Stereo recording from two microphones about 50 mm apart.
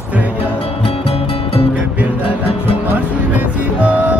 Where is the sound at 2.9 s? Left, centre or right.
Right.